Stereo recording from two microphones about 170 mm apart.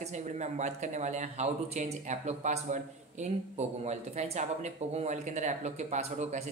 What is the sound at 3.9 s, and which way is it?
Speech, 40° right (ahead or behind).